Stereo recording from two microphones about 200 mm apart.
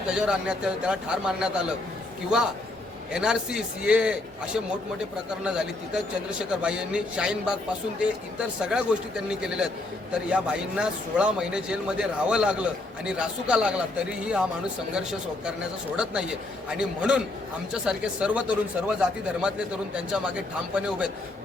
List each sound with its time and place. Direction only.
0.1 s speech: 5° right (ahead or behind)
3.1 s speech: 5° right (ahead or behind)
16.6 s speech: 5° right (ahead or behind)